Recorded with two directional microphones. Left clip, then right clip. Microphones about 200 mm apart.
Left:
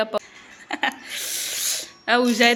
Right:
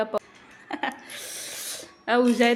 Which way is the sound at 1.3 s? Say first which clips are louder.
Left 11 dB; centre (ahead or behind).